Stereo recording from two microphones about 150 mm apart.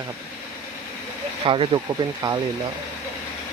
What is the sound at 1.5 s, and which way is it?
Speech, 35° right (ahead or behind).